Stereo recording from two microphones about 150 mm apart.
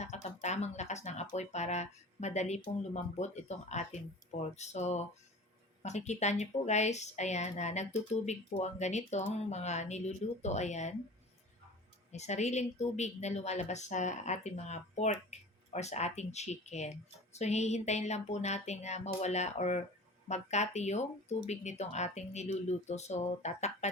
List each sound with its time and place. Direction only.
0.0 s speech: 50° left (ahead or behind)
12.1 s speech: 50° left (ahead or behind)